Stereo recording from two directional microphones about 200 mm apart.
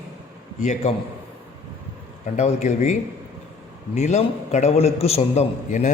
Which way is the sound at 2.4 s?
35° left (ahead or behind).